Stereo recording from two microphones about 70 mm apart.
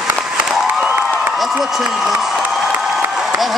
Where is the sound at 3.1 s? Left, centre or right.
Centre.